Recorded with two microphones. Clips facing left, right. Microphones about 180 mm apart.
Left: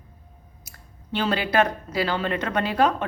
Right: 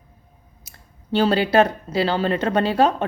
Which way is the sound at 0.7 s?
35° right (ahead or behind).